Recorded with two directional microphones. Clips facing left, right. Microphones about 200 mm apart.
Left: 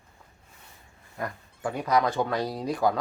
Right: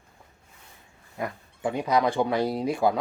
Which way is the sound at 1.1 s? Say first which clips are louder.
Right 2 dB; 15° right (ahead or behind).